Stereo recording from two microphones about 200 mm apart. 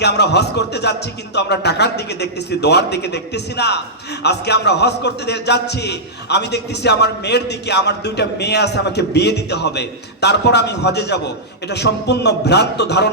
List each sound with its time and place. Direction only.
0.0 s a man's voice: 55° left (ahead or behind)